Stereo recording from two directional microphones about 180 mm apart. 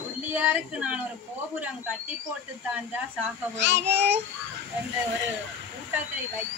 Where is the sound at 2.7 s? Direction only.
10° right (ahead or behind).